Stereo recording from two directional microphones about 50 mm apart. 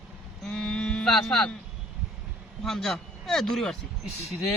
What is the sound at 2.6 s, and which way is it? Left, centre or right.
Speech, centre.